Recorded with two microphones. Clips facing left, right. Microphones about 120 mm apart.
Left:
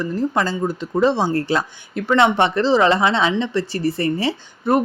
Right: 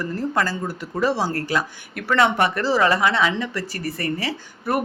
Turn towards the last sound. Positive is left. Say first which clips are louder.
# left 5 dB
turn(degrees=25)  # may be behind; listen again after turning